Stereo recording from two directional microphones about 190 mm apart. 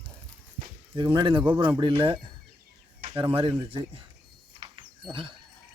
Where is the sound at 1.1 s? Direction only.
25° right (ahead or behind).